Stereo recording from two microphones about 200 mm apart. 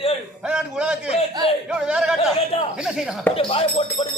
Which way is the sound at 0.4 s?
5° right (ahead or behind).